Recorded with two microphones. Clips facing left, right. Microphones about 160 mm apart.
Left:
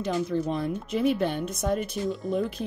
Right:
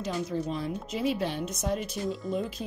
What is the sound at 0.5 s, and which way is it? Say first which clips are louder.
Speech: left 4 dB; 55° left (ahead or behind).